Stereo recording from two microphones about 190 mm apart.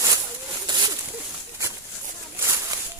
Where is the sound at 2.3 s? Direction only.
15° right (ahead or behind).